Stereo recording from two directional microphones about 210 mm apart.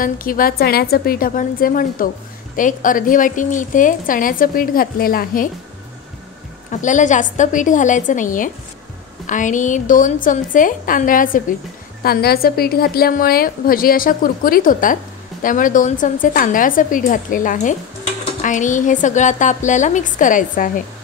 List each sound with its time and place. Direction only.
0.0 s a woman's voice: 40° left (ahead or behind)
6.7 s a woman's voice: 35° left (ahead or behind)